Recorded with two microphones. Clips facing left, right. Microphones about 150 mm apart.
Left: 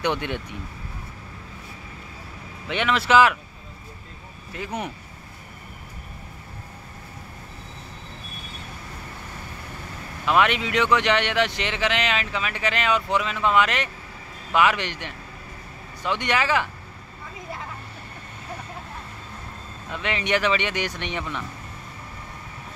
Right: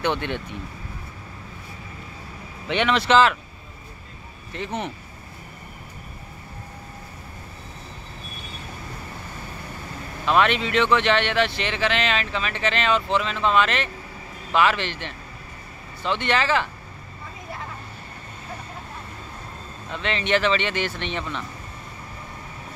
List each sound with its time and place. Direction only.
0.0 s speech: 15° left (ahead or behind)
2.7 s speech: 5° left (ahead or behind)
4.5 s speech: 10° left (ahead or behind)
10.2 s speech: 15° left (ahead or behind)
19.9 s speech: 15° left (ahead or behind)